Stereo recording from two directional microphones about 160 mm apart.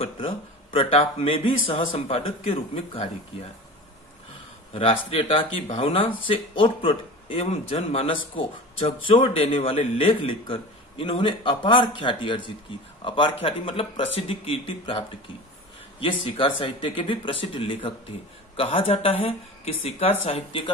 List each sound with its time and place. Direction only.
0.7 s a man's voice: 40° left (ahead or behind)
4.7 s a man's voice: 35° left (ahead or behind)